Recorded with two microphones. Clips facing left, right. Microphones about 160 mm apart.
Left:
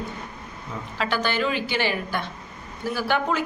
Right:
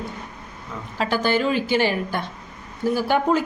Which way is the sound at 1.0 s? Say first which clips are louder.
Right 4 dB; 40° right (ahead or behind).